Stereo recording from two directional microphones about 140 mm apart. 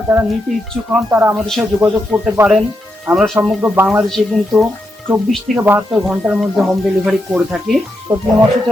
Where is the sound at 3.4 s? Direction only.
15° right (ahead or behind).